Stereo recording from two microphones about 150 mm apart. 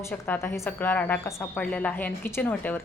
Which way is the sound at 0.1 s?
15° left (ahead or behind).